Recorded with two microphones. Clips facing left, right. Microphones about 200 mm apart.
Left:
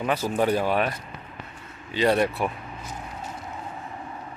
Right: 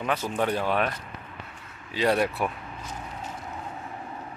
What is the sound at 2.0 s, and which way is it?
Speech, centre (ahead or behind).